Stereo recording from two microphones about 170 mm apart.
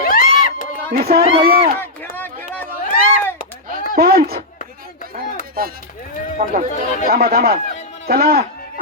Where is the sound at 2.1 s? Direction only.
10° left (ahead or behind).